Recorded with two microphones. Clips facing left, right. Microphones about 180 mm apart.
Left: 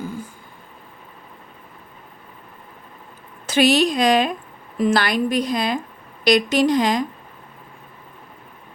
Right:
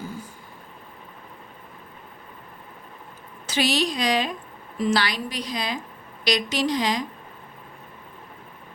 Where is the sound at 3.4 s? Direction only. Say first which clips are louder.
Left 7 dB; 55° left (ahead or behind).